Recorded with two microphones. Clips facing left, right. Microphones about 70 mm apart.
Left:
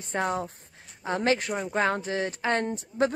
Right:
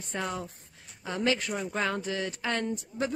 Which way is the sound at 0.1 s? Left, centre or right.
Left.